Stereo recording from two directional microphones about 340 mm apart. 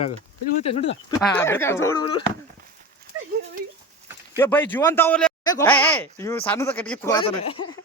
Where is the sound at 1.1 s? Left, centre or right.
Centre.